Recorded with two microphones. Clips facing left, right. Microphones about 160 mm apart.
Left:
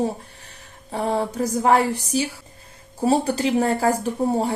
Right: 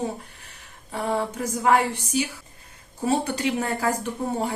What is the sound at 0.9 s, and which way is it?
Speech, 35° left (ahead or behind).